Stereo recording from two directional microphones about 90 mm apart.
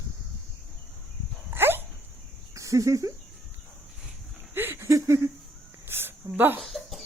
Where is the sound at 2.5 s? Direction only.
35° right (ahead or behind).